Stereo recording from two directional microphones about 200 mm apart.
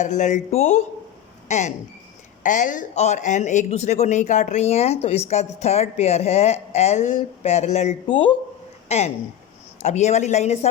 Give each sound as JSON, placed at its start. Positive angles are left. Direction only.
{"t": 0.0, "sound": "speech", "side_deg": 40}